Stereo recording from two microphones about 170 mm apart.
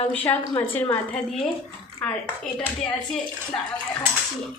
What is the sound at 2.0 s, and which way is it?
Speech, 5° left (ahead or behind).